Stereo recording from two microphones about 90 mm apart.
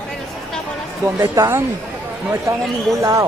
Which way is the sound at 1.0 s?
30° right (ahead or behind).